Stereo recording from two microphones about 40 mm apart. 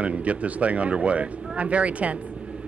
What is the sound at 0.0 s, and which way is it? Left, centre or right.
Speech, right.